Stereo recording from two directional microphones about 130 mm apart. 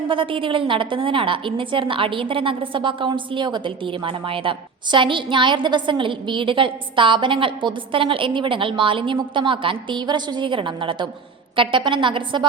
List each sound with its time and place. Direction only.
0.1 s a woman's voice: 40° right (ahead or behind)